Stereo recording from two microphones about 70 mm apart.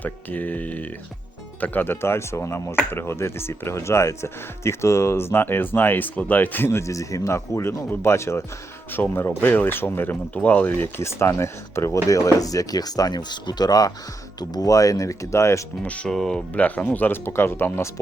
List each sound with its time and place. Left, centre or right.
0.0 s speech: left
6.7 s speech: left
11.0 s speech: left
12.0 s speech: left
16.0 s speech: centre
16.6 s speech: left